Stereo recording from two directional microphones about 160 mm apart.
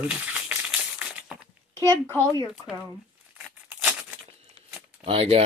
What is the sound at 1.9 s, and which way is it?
Speech, 15° left (ahead or behind).